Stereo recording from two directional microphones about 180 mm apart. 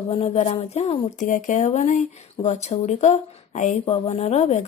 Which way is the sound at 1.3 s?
45° left (ahead or behind).